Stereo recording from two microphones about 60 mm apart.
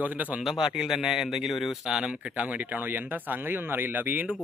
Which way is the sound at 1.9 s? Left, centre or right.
Centre.